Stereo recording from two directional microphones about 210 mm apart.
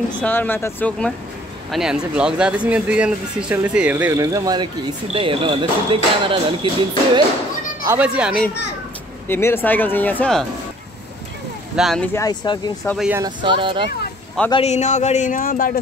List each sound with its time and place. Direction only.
0.2 s speech: 10° left (ahead or behind); by 6.7 s 25° right (ahead or behind)
7.8 s speech: 10° right (ahead or behind)
9.3 s speech: 10° left (ahead or behind)
11.7 s speech: centre (ahead or behind); by 12.7 s 20° left (ahead or behind)
12.8 s speech: centre (ahead or behind)
13.1 s speech: 20° right (ahead or behind)
14.5 s speech: 30° left (ahead or behind)